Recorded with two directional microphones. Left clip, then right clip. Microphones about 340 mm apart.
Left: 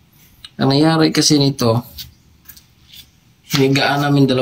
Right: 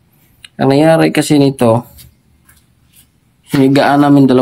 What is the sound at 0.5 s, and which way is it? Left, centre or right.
Speech, centre.